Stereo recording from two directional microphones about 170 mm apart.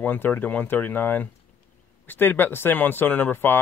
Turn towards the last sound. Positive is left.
turn(degrees=10)  # may be behind; listen again after turning